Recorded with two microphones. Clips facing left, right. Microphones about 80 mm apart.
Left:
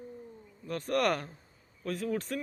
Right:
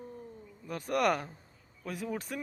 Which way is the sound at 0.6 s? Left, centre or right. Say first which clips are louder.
Even; centre.